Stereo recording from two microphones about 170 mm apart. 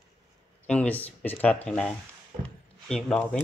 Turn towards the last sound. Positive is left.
turn(degrees=5)  # may be behind; listen again after turning